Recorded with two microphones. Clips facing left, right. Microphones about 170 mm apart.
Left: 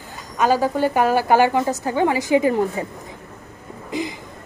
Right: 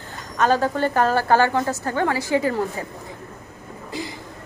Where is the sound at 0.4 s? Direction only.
10° left (ahead or behind).